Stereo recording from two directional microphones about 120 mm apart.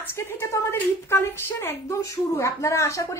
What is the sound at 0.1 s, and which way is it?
A woman's voice, 20° left (ahead or behind).